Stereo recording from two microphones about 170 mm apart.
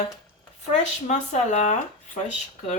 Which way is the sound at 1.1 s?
45° left (ahead or behind).